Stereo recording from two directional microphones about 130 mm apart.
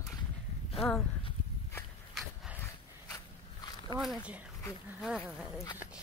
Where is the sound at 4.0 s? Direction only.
5° right (ahead or behind).